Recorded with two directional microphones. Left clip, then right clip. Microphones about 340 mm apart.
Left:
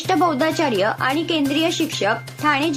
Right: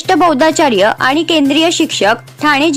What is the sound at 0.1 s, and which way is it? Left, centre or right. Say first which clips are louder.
A woman's voice: right 9 dB; right.